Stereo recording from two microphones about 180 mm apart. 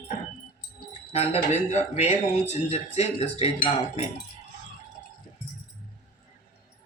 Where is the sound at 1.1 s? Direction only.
35° left (ahead or behind).